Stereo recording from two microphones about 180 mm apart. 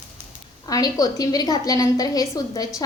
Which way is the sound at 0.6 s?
20° left (ahead or behind).